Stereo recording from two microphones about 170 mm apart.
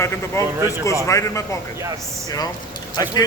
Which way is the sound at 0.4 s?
15° left (ahead or behind).